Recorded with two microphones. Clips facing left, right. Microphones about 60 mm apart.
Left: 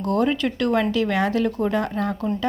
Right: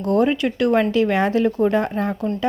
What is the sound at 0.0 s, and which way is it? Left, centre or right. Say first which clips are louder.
Speech: right 3 dB; right.